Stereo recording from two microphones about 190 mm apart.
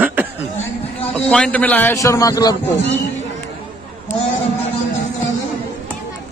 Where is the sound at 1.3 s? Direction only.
5° left (ahead or behind).